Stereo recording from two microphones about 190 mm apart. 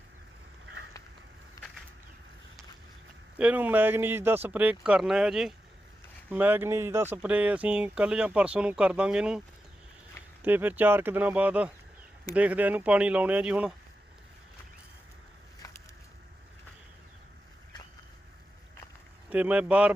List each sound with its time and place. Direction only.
1.6 s a sound: 20° left (ahead or behind)
3.3 s speech: 5° right (ahead or behind)
10.4 s speech: 10° right (ahead or behind)
19.3 s speech: 5° right (ahead or behind)